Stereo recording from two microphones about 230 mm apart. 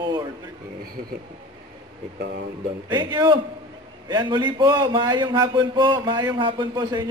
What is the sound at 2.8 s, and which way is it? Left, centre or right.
A man's voice, centre.